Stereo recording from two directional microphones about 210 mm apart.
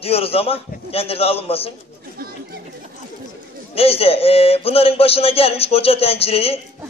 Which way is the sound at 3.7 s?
30° left (ahead or behind).